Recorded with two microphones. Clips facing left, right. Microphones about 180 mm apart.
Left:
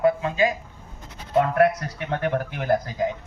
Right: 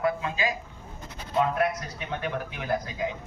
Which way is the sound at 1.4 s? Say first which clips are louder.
Left 6 dB; 65° left (ahead or behind).